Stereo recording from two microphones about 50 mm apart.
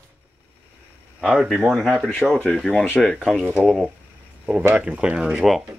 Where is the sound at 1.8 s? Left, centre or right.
Centre.